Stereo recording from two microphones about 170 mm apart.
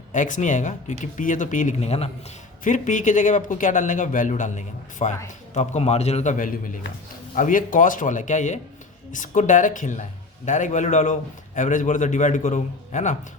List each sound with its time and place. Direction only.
0.1 s a man's voice: 50° left (ahead or behind)